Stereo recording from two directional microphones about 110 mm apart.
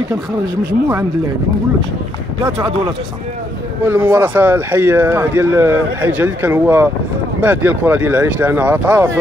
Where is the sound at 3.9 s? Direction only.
20° right (ahead or behind).